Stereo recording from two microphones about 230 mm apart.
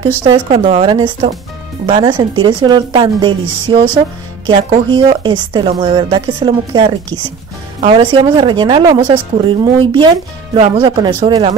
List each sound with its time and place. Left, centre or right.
0.3 s a woman's voice: right